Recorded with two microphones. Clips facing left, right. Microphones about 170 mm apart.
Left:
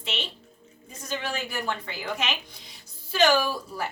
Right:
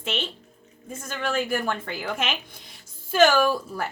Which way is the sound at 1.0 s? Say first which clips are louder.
Right 4 dB; 50° right (ahead or behind).